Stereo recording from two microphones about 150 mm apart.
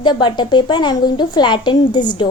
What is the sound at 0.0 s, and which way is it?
A woman's voice, 30° left (ahead or behind).